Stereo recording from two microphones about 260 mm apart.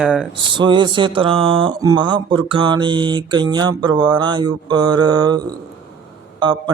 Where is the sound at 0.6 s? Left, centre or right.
Centre.